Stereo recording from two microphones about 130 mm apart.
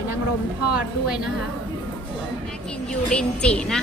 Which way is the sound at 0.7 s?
5° right (ahead or behind).